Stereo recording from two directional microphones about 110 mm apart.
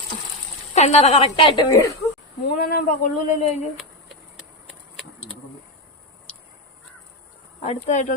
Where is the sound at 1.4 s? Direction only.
45° left (ahead or behind).